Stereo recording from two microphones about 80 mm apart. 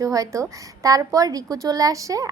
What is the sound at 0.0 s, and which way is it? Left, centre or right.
A woman's voice, right.